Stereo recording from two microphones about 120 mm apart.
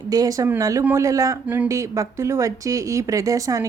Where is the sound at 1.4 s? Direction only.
15° right (ahead or behind).